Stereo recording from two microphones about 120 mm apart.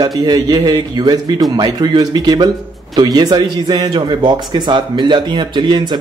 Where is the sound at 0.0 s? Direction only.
35° right (ahead or behind).